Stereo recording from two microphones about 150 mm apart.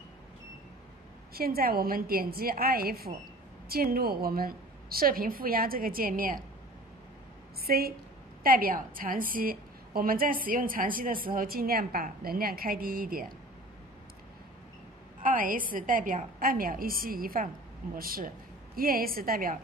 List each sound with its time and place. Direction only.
1.3 s a woman's voice: 85° right; by 6.4 s 70° right (ahead or behind)
7.6 s a woman's voice: 90° right
8.5 s a woman's voice: 70° right (ahead or behind)
15.2 s a woman's voice: 65° right (ahead or behind)